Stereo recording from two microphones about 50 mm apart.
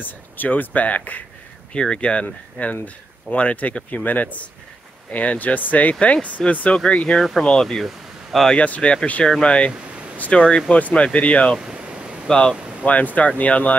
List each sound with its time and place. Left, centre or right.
0.0 s speech: left
1.7 s speech: centre
7.2 s speech: centre
7.8 s a sound: centre
8.5 s speech: left
9.7 s a sound: right
10.3 s speech: centre
11.6 s pink noise: right
12.3 s speech: centre
12.5 s a sound: right
12.8 s speech: left